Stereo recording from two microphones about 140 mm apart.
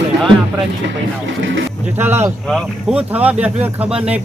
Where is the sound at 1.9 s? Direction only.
15° right (ahead or behind).